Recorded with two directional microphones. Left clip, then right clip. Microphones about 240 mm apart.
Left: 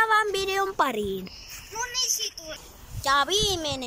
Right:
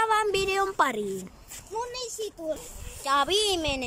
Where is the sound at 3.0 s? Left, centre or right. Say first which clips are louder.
Left 1 dB; centre.